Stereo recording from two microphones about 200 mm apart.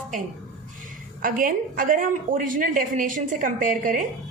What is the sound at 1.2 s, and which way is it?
A woman's voice, 45° right (ahead or behind).